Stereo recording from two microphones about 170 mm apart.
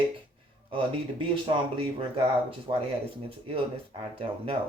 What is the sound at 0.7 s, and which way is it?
Speech, 30° right (ahead or behind).